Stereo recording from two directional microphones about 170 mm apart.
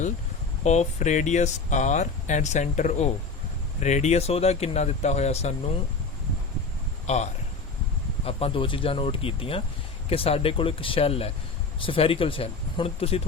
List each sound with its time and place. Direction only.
0.6 s speech: 40° left (ahead or behind)
7.1 s speech: 40° left (ahead or behind)